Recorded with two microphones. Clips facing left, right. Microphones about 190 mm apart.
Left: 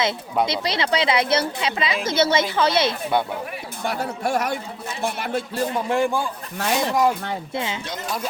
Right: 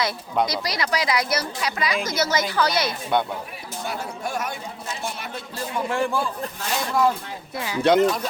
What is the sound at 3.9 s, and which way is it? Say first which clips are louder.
Speech: left 6 dB; 70° left (ahead or behind).